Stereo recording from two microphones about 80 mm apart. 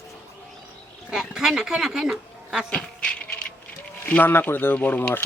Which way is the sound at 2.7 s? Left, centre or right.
Centre.